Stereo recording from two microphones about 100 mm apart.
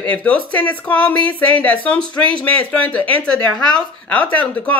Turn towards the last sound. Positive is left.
turn(degrees=15)  # may be behind; listen again after turning